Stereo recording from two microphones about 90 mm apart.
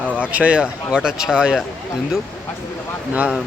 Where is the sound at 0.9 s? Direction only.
10° right (ahead or behind).